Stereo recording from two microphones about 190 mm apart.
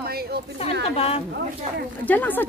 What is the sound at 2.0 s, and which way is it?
Speech, 10° left (ahead or behind).